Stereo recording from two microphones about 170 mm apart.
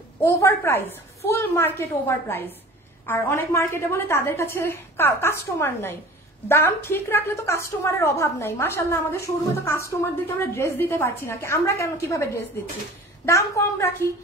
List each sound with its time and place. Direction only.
0.2 s a woman's voice: 15° left (ahead or behind)